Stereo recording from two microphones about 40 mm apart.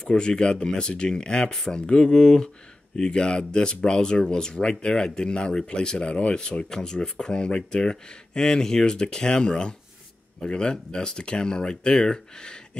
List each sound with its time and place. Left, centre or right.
0.0 s speech: centre
6.7 s speech: centre